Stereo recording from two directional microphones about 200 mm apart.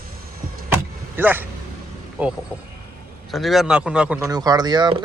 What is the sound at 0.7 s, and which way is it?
Vehicle, 10° right (ahead or behind).